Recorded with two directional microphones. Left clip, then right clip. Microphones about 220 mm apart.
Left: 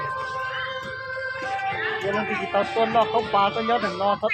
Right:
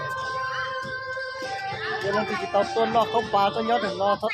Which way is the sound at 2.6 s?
5° left (ahead or behind).